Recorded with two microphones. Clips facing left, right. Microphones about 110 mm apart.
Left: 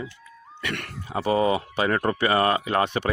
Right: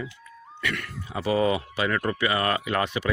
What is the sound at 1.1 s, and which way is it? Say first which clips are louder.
Speech: left 2 dB; 35° left (ahead or behind).